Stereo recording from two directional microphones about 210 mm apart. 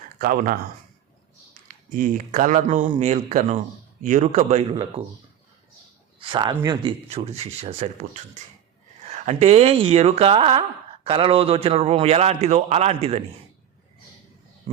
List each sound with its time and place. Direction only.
0.2 s speech: 40° right (ahead or behind)
1.6 s a man's voice: 40° right (ahead or behind)
6.1 s a man's voice: 25° right (ahead or behind)